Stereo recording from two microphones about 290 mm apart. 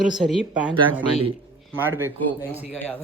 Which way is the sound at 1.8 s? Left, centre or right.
Centre.